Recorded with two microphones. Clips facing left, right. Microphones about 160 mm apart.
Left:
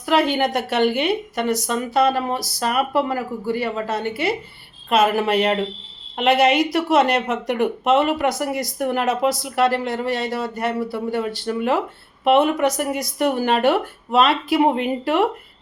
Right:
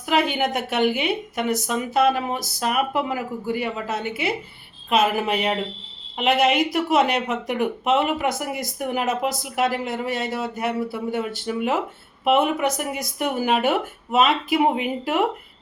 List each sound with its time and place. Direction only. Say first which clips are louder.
0.0 s speech: left 3 dB; centre (ahead or behind)